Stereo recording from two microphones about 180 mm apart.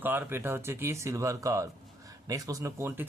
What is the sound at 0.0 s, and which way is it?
Speech, 10° right (ahead or behind).